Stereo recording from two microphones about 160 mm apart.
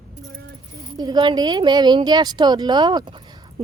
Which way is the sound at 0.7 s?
25° right (ahead or behind).